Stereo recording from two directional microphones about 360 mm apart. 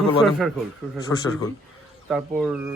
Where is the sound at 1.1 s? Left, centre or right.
Left.